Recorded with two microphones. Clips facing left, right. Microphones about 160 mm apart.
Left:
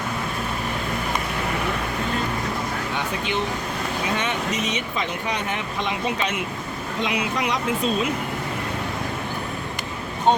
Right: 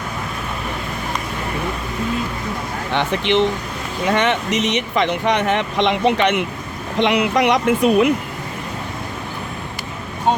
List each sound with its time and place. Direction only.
2.9 s speech: 75° right (ahead or behind)